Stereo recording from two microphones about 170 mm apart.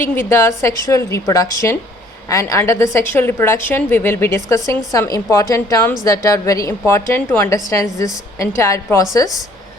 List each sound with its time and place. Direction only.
0.0 s a woman's voice: 15° left (ahead or behind)